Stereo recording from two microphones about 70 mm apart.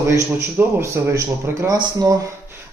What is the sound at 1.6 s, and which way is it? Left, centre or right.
Speech, right.